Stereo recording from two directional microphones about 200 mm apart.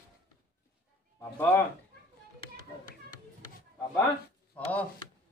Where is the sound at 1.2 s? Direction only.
10° left (ahead or behind).